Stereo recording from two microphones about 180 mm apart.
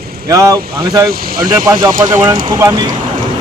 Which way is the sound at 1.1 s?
55° right (ahead or behind).